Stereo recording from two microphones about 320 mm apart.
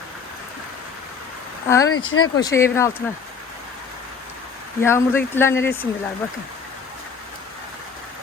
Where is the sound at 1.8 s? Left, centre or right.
Left.